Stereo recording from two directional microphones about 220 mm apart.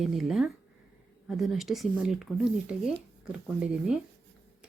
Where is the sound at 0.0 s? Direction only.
Centre (ahead or behind).